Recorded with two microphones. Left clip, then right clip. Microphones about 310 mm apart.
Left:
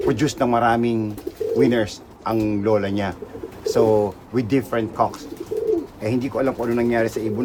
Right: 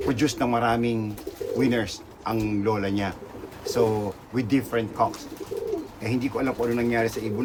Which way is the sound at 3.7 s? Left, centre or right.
Centre.